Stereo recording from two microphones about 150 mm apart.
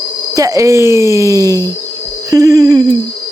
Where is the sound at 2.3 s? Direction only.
20° right (ahead or behind).